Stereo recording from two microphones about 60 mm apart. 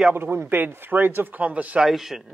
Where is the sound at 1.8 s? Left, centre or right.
Centre.